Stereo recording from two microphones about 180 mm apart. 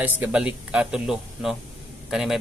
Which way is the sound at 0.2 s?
5° right (ahead or behind).